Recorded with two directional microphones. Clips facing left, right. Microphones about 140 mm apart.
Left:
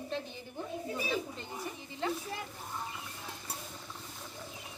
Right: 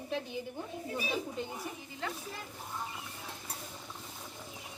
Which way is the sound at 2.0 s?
30° left (ahead or behind).